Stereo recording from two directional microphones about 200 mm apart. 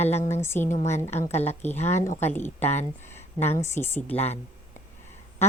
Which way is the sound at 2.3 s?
10° left (ahead or behind).